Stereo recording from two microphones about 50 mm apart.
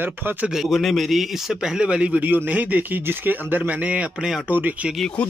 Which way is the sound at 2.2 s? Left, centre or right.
Right.